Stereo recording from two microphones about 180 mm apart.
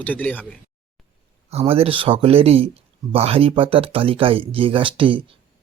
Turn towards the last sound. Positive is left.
turn(degrees=-30)  # may be behind; listen again after turning